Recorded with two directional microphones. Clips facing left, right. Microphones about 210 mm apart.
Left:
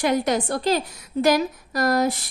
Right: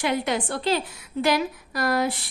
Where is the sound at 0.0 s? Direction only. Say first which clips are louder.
Left 4 dB; 40° left (ahead or behind).